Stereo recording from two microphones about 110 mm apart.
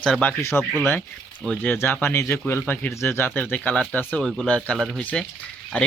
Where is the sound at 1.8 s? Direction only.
20° left (ahead or behind).